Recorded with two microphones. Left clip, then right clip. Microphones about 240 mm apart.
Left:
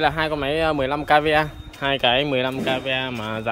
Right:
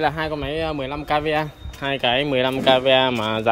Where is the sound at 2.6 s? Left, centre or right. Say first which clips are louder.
Right 8 dB; centre.